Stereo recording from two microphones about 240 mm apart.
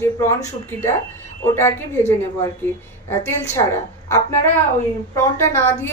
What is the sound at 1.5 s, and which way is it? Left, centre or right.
Speech, centre.